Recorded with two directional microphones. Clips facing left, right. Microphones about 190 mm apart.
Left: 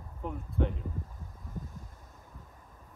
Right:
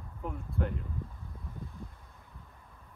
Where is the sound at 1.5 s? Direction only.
45° left (ahead or behind).